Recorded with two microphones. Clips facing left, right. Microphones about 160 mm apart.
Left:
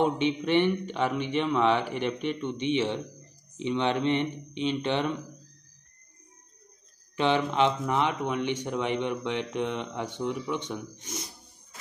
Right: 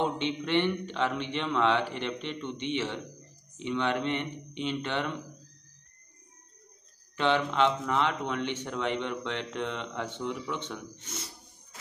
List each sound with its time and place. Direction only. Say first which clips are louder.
0.0 s speech: left 5 dB; 15° left (ahead or behind)
7.2 s speech: left 2 dB; 15° left (ahead or behind)